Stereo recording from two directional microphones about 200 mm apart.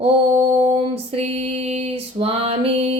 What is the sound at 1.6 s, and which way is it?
Music, 30° right (ahead or behind).